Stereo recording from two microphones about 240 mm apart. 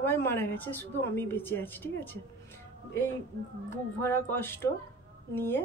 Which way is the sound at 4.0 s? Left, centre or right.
Centre.